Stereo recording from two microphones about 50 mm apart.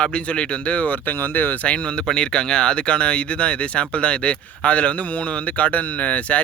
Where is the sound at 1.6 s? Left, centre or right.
Left.